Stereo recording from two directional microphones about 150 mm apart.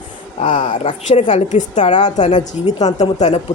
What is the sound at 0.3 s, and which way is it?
A woman's voice, 55° left (ahead or behind).